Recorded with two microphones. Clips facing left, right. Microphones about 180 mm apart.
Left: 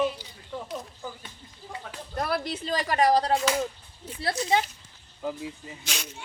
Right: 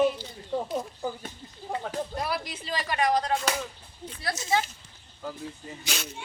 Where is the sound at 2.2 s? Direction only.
50° left (ahead or behind).